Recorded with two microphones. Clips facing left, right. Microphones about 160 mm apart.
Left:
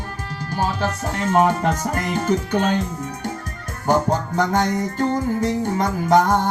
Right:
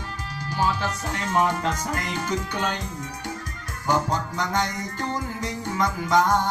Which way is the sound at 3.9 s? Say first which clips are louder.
Left 5 dB; 55° left (ahead or behind).